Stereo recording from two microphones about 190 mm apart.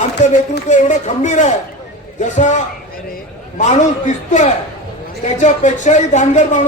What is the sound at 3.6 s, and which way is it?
A man's voice, 35° left (ahead or behind).